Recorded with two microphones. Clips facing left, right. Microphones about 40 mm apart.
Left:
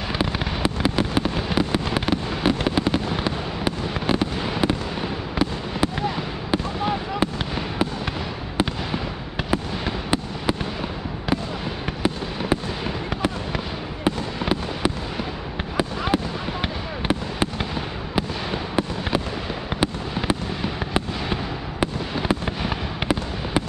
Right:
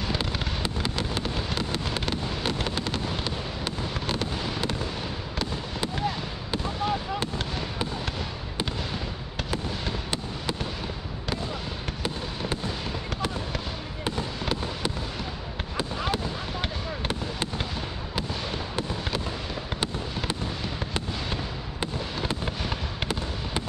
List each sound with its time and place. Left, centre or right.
0.1 s fireworks: centre
9.5 s fireworks: centre
12.0 s fireworks: centre